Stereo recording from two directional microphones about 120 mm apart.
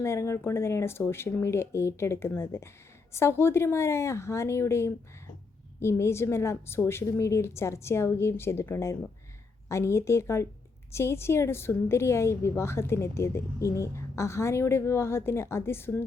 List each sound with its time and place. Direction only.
0.0 s a woman's voice: 25° left (ahead or behind)